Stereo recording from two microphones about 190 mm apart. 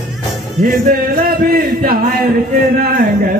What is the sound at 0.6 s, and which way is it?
Mantra, 45° right (ahead or behind).